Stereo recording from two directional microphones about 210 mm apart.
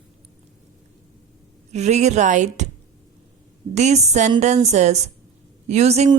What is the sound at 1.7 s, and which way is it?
Speech, 35° right (ahead or behind).